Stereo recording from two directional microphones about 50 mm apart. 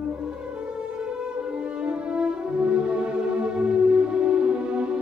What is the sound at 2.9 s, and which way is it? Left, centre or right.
Music, right.